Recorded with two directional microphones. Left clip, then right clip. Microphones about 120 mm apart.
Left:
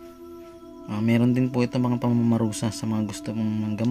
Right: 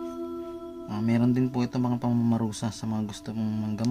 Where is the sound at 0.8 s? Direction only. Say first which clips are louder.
Left 3 dB; 10° left (ahead or behind).